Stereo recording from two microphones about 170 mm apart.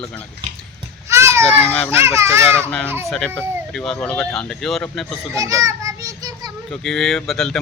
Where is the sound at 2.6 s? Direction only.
10° left (ahead or behind).